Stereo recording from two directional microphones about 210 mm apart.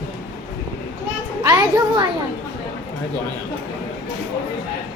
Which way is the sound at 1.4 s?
20° right (ahead or behind).